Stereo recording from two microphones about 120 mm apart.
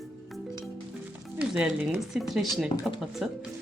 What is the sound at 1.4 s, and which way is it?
Speech, 10° right (ahead or behind).